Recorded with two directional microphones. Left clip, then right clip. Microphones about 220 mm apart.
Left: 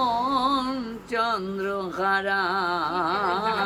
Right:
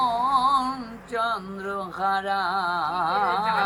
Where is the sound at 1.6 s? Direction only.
10° left (ahead or behind).